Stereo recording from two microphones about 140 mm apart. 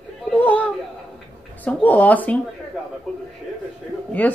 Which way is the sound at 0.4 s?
10° left (ahead or behind).